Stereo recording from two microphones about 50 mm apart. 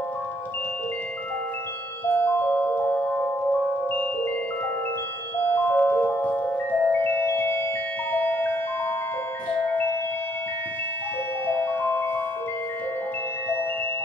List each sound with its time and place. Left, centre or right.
2.0 s music: left
5.4 s music: left
11.4 s music: left